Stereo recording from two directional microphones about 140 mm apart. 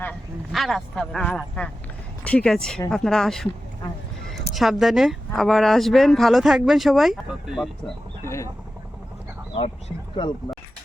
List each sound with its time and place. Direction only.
0.5 s speech: centre (ahead or behind)
4.5 s speech: centre (ahead or behind)
8.2 s vehicle: 20° left (ahead or behind)
10.2 s speech: 35° left (ahead or behind)